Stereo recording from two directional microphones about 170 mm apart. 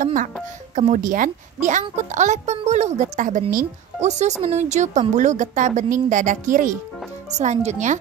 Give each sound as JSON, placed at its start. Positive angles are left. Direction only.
{"t": 0.0, "sound": "a child's voice", "side_deg": -45}